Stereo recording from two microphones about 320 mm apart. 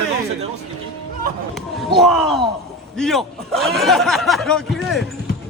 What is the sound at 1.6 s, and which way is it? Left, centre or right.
A man's voice, centre.